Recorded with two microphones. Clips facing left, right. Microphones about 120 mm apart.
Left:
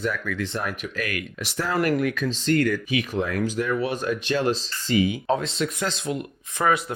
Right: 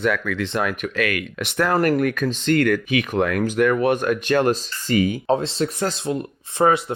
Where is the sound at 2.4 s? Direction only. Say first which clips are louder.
Right 3 dB; 65° right (ahead or behind); by 5.1 s 50° right (ahead or behind).